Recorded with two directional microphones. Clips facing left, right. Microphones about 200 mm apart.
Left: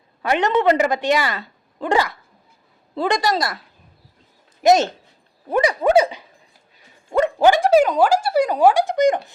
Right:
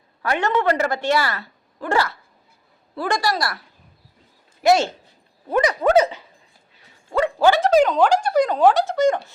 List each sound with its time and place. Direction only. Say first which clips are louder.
0.2 s a woman's voice: left 3 dB; 20° left (ahead or behind)
4.6 s a woman's voice: left 2 dB; 20° left (ahead or behind)